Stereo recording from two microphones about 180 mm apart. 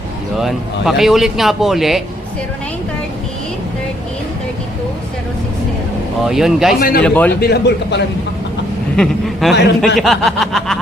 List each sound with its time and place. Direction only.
0.3 s a man's voice: centre (ahead or behind)
6.2 s a man's voice: centre (ahead or behind)
6.7 s a man's voice: 55° left (ahead or behind)
7.0 s a man's voice: 10° left (ahead or behind)
7.4 s a man's voice: 65° left (ahead or behind)
9.0 s a man's voice: centre (ahead or behind)